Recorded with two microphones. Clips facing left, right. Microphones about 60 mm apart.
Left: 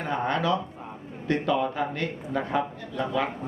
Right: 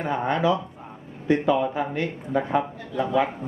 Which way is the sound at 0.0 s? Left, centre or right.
Centre.